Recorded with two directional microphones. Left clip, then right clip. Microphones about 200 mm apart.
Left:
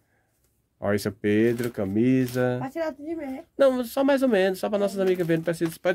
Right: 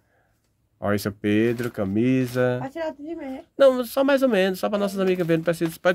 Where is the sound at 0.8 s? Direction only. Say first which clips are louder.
Right 1 dB; 10° right (ahead or behind).